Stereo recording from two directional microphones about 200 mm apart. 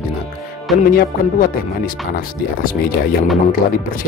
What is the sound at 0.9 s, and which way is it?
Speech, 45° left (ahead or behind).